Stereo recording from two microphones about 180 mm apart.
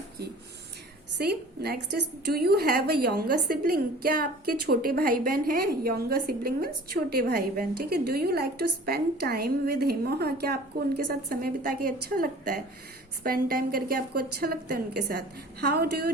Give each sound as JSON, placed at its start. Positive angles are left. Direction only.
{"t": 1.2, "sound": "a woman's voice", "side_deg": -60}